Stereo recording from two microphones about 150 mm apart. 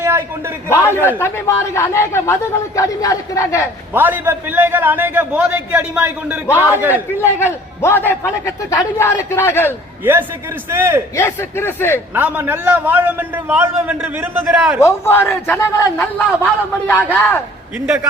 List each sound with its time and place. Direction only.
0.0 s a man's voice: 15° right (ahead or behind)
1.0 s speech: 15° left (ahead or behind)
3.9 s a man's voice: 10° right (ahead or behind)
7.2 s a man's voice: 15° left (ahead or behind)
10.0 s a man's voice: 15° right (ahead or behind)
11.1 s a man's voice: 15° left (ahead or behind)
12.1 s a man's voice: 15° right (ahead or behind)
14.8 s a man's voice: 15° left (ahead or behind)
17.7 s a man's voice: 10° right (ahead or behind)